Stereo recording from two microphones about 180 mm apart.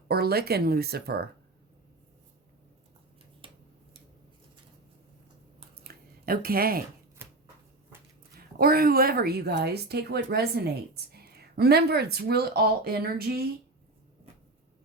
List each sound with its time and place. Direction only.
0.1 s a woman's voice: 60° right (ahead or behind)
3.4 s a sound: 30° right (ahead or behind)
5.7 s squish: 55° right (ahead or behind)
8.4 s a woman's voice: 55° right (ahead or behind)